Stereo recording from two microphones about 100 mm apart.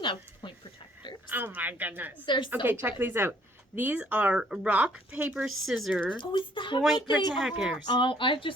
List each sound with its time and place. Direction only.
0.0 s a sound: 55° left (ahead or behind)
1.3 s a woman's voice: 20° right (ahead or behind)
2.2 s speech: 55° left (ahead or behind)
2.6 s a woman's voice: 20° right (ahead or behind)
5.5 s speech: centre (ahead or behind)
6.1 s speech: 55° left (ahead or behind)
7.3 s speech: centre (ahead or behind)
7.9 s speech: 55° left (ahead or behind)